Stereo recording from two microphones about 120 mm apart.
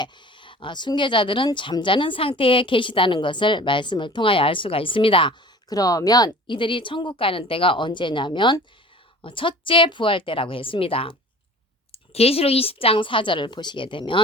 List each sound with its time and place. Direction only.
0.0 s speech: 40° left (ahead or behind)
5.6 s speech: 30° left (ahead or behind)